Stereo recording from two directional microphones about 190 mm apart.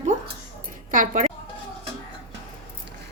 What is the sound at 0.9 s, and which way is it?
Speech, 40° right (ahead or behind).